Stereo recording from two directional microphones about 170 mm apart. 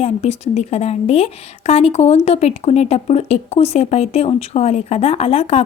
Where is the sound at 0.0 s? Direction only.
40° left (ahead or behind).